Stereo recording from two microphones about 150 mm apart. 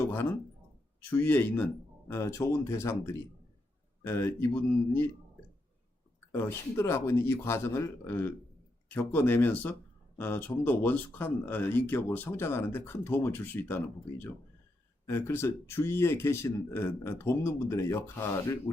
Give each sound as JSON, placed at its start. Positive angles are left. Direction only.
{"t": 0.0, "sound": "a sound", "side_deg": 15}
{"t": 1.1, "sound": "speech", "side_deg": 15}
{"t": 6.3, "sound": "speech", "side_deg": 15}